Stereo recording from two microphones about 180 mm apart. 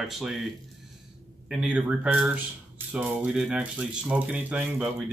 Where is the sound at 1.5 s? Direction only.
5° right (ahead or behind).